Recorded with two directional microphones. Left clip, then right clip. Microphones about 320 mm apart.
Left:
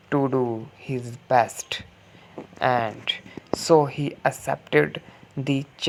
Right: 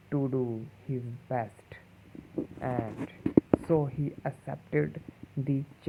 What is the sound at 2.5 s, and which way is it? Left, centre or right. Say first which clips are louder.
Speech: left 15 dB; centre.